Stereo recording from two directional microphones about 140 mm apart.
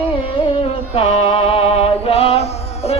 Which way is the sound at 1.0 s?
45° left (ahead or behind).